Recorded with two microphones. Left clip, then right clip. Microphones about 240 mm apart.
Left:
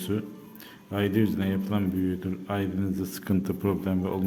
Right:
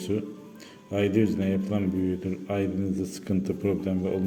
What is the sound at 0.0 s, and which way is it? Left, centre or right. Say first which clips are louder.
A man's voice: right 2 dB; centre.